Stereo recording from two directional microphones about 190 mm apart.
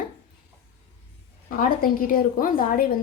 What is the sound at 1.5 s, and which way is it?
A woman's voice, 45° left (ahead or behind).